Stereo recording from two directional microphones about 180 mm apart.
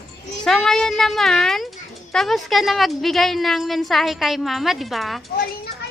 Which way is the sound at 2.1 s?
Centre (ahead or behind).